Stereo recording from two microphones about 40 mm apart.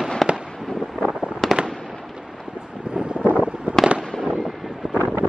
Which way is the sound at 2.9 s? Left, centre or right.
Right.